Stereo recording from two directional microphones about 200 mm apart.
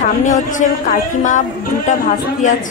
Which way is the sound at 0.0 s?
40° left (ahead or behind).